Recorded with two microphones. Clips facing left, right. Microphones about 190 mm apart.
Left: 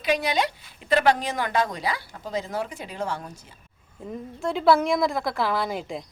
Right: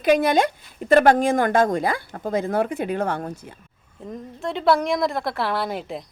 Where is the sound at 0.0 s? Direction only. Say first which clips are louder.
Right 6 dB; 50° right (ahead or behind).